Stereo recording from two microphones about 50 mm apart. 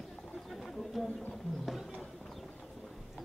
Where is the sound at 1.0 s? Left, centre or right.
Centre.